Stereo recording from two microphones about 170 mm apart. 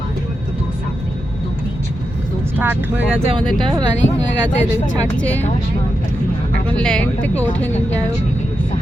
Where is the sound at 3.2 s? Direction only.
30° right (ahead or behind).